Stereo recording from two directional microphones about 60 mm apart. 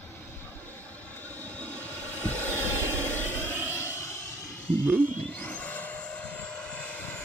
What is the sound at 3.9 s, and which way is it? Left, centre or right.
Vehicle, left.